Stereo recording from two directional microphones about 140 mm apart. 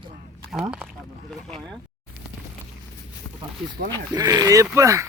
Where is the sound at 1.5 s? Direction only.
5° left (ahead or behind).